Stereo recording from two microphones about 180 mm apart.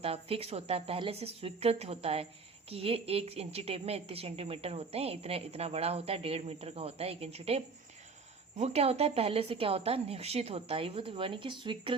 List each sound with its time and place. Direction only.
0.0 s a woman's voice: 35° right (ahead or behind)